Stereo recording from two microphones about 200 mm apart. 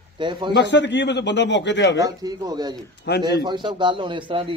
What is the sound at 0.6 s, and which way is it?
A man's voice, 60° left (ahead or behind).